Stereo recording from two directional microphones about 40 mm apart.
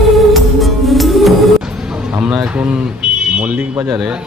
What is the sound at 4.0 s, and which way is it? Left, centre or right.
Speech, right.